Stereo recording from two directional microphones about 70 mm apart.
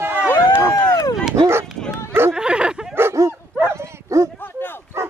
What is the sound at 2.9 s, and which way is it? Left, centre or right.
Dog, right.